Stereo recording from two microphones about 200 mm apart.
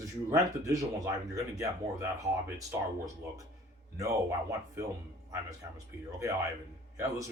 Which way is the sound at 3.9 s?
15° right (ahead or behind).